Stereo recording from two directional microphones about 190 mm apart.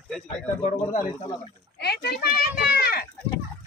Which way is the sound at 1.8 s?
55° left (ahead or behind).